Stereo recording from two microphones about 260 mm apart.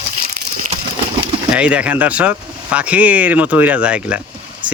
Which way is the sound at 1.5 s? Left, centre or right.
Centre.